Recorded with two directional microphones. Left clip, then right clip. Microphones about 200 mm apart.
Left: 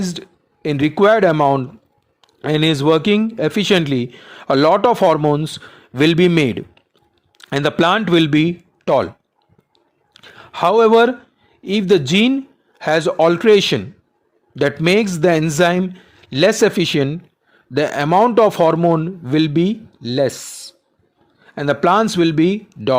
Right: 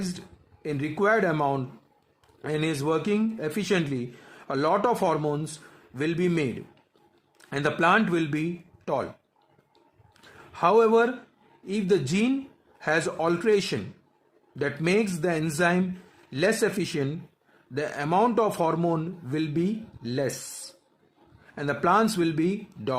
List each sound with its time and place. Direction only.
0.6 s a man's voice: 45° left (ahead or behind)
10.3 s speech: 45° left (ahead or behind)
21.5 s speech: 40° left (ahead or behind)